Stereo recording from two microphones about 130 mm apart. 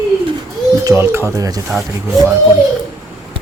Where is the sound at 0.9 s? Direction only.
20° right (ahead or behind).